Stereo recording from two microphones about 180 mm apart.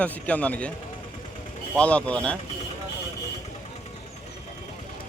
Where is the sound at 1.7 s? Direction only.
5° left (ahead or behind).